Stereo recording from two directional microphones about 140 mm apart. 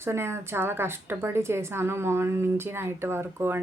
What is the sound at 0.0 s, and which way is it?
Speech, 20° right (ahead or behind).